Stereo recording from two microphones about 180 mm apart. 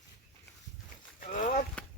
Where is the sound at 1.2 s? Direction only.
45° left (ahead or behind).